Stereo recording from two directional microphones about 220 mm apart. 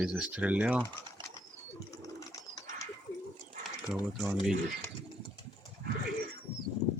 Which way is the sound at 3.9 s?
5° right (ahead or behind).